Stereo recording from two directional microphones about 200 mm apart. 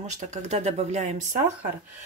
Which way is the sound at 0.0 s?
35° right (ahead or behind).